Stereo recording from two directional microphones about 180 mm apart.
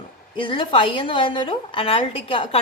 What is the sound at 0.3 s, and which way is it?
A woman's voice, 25° left (ahead or behind).